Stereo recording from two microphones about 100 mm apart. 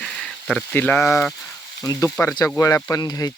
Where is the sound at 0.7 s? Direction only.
20° left (ahead or behind).